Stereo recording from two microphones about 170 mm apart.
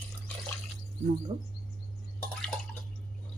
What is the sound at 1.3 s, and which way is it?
Speech, 30° right (ahead or behind).